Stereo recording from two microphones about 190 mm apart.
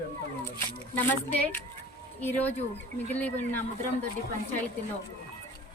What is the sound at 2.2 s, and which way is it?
A woman's voice, 10° left (ahead or behind).